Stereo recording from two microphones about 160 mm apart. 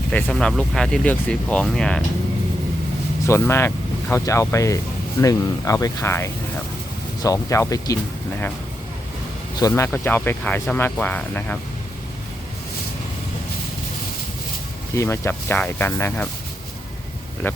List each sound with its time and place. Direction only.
0.1 s speech: 5° left (ahead or behind)
3.2 s speech: 15° left (ahead or behind)
9.6 s speech: 20° left (ahead or behind)
14.9 s speech: 15° left (ahead or behind)
17.4 s speech: 15° left (ahead or behind)